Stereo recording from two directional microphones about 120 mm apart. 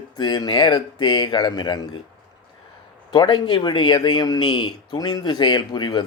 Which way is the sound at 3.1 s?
40° left (ahead or behind).